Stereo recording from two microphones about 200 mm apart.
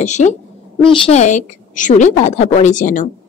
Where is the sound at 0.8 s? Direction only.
25° left (ahead or behind).